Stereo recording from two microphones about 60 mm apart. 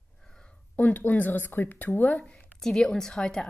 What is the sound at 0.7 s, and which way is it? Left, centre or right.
Speech, left.